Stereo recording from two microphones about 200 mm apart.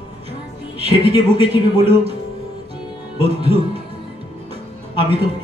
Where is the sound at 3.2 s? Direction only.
30° right (ahead or behind).